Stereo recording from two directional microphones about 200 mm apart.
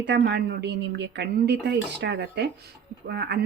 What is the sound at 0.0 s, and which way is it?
A woman's voice, 60° right (ahead or behind).